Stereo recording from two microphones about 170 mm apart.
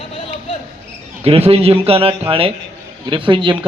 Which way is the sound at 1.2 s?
35° right (ahead or behind).